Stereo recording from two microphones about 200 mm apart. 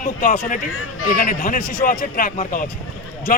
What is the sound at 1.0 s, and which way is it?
Speech, 45° left (ahead or behind).